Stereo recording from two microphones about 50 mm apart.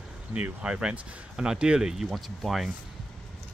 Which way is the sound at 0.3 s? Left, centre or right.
Right.